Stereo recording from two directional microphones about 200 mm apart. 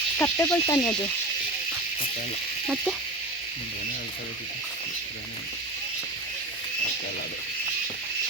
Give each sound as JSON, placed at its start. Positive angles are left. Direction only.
{"t": 0.2, "sound": "speech", "side_deg": 15}